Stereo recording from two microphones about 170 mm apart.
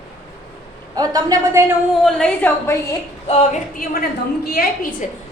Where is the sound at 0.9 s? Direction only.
20° right (ahead or behind).